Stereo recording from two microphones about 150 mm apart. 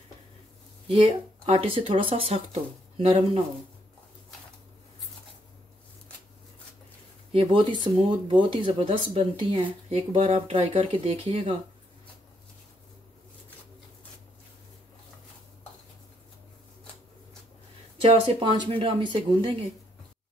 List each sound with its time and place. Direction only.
0.8 s speech: 40° right (ahead or behind)
7.3 s speech: 35° right (ahead or behind)
18.0 s speech: 35° right (ahead or behind)